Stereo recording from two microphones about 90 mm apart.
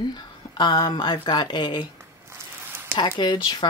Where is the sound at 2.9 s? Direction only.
60° left (ahead or behind).